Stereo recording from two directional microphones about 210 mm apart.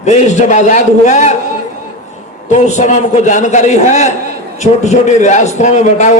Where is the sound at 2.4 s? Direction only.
35° left (ahead or behind).